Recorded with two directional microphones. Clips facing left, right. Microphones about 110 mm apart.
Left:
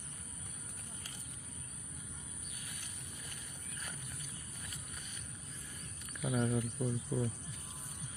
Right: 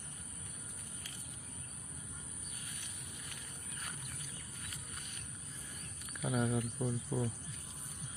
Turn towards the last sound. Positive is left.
turn(degrees=-20)  # may be behind; listen again after turning